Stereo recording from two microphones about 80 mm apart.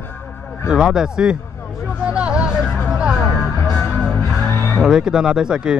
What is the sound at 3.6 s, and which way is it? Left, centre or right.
Music, left.